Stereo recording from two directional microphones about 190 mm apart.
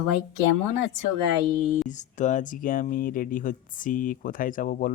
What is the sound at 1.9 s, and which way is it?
Speech, 40° left (ahead or behind).